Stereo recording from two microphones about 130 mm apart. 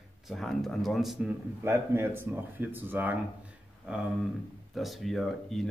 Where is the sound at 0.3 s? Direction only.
Centre (ahead or behind).